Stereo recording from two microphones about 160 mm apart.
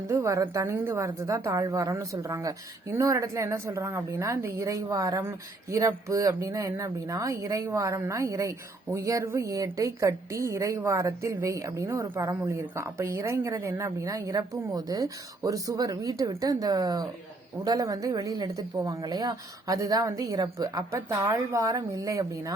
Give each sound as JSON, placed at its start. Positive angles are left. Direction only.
{"t": 0.1, "sound": "a woman's voice", "side_deg": -20}